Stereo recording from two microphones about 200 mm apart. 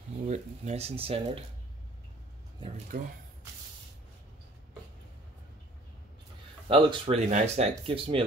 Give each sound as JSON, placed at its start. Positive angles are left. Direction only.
{"t": 0.3, "sound": "speech", "side_deg": -35}
{"t": 2.9, "sound": "speech", "side_deg": -35}
{"t": 6.7, "sound": "speech", "side_deg": -30}